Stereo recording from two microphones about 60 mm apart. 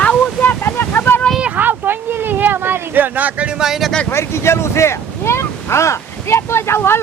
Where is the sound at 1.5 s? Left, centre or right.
Right.